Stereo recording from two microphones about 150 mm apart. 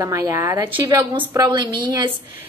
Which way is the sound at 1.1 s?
30° right (ahead or behind).